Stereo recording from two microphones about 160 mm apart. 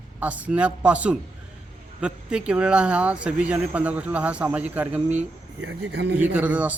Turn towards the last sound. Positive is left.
turn(degrees=-10)  # may be behind; listen again after turning